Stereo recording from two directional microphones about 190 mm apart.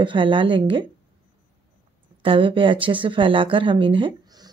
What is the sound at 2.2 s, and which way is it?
Speech, 25° right (ahead or behind).